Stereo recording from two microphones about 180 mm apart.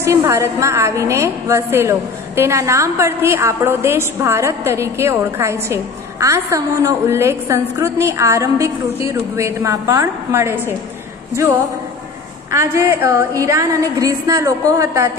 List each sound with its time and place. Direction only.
0.0 s a woman's voice: 15° right (ahead or behind)
12.4 s a woman's voice: 15° right (ahead or behind)